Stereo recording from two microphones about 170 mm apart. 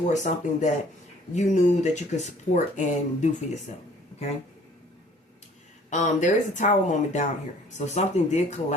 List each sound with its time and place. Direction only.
0.1 s speech: 45° left (ahead or behind)
5.9 s speech: 45° left (ahead or behind)